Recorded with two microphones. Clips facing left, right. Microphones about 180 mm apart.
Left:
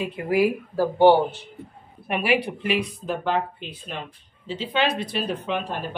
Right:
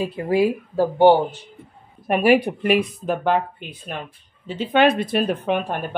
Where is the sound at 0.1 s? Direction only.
30° right (ahead or behind).